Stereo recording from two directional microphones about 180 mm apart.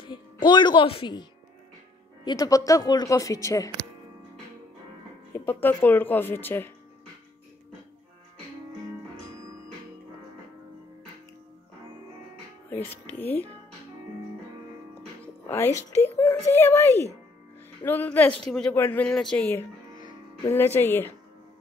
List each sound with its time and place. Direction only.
0.0 s a woman's voice: 25° left (ahead or behind)
2.2 s speech: 20° left (ahead or behind)
5.4 s speech: 10° left (ahead or behind)
12.6 s speech: 10° left (ahead or behind)
15.4 s speech: 15° left (ahead or behind)